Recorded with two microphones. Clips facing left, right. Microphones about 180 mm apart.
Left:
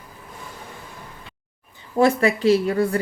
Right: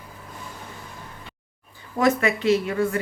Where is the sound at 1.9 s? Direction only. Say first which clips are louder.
Left 3 dB; 30° left (ahead or behind).